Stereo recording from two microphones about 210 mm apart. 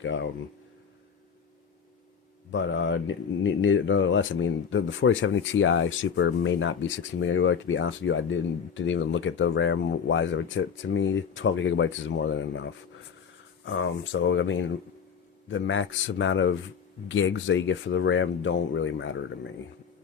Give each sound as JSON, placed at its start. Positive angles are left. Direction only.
{"t": 0.0, "sound": "speech", "side_deg": 60}
{"t": 2.5, "sound": "speech", "side_deg": 60}